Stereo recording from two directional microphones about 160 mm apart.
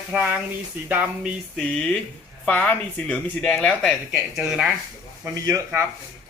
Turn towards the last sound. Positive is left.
turn(degrees=-20)  # may be behind; listen again after turning